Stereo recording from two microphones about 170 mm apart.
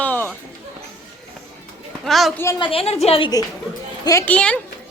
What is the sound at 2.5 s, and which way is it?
Speech, 30° left (ahead or behind).